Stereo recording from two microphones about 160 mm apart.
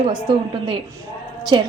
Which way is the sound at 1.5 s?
30° right (ahead or behind).